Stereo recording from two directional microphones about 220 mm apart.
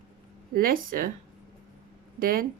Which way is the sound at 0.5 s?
40° right (ahead or behind).